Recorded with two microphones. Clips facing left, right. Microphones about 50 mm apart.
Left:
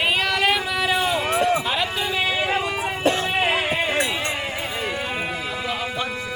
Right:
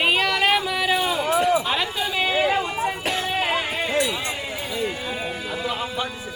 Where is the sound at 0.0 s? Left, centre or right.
Centre.